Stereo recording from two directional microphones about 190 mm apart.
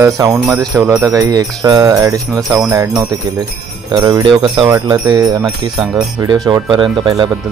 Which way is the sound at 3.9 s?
25° right (ahead or behind).